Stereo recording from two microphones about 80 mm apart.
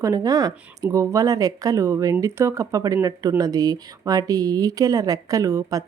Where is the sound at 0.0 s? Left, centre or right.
Right.